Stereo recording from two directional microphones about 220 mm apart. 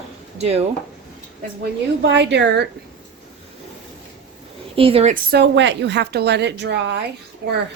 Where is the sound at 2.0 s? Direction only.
50° right (ahead or behind).